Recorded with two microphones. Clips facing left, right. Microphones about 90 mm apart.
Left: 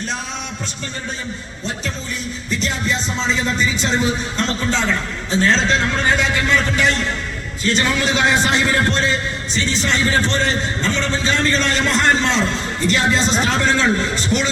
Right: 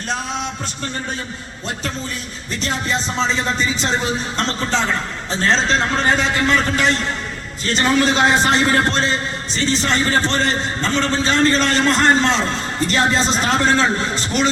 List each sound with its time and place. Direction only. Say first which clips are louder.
4.4 s a man's voice: right 2 dB; 35° right (ahead or behind)